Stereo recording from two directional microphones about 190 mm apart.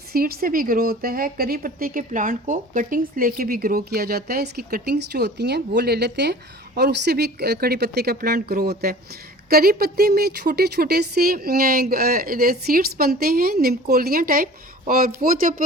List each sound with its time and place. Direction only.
0.1 s a woman's voice: 50° right (ahead or behind)